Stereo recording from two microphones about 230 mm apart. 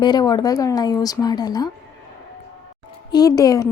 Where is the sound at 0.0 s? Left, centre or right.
Centre.